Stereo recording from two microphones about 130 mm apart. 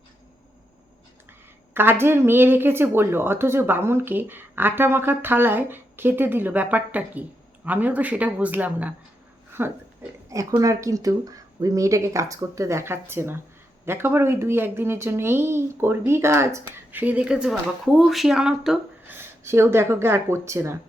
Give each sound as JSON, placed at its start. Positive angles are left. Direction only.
{"t": 1.3, "sound": "a woman's voice", "side_deg": -15}
{"t": 19.1, "sound": "speech", "side_deg": -20}